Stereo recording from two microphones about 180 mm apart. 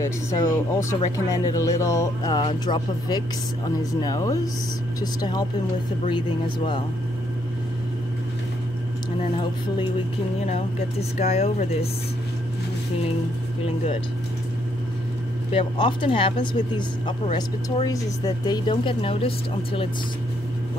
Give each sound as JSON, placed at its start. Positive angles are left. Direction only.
{"t": 0.0, "sound": "speech", "side_deg": 15}
{"t": 10.4, "sound": "speech", "side_deg": 35}
{"t": 15.5, "sound": "speech", "side_deg": 30}